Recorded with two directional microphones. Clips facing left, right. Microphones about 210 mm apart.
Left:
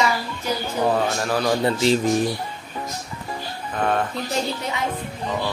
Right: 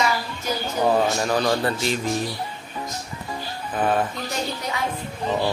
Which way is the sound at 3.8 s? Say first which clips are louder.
Right 1 dB; 5° right (ahead or behind).